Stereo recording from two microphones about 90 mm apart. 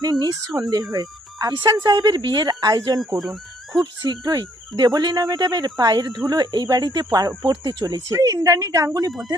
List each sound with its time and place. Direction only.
0.0 s speech: 45° right (ahead or behind)
3.2 s speech: centre (ahead or behind)
4.0 s speech: 45° right (ahead or behind)